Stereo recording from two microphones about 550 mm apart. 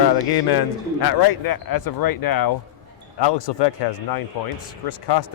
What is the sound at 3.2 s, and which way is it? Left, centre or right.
Speech, left.